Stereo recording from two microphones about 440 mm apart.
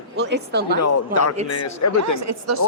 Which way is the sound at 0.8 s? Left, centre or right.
Left.